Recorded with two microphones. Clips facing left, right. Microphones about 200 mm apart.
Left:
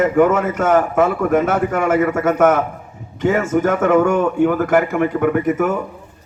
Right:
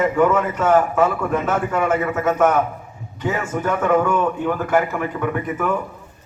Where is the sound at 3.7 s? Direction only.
80° left.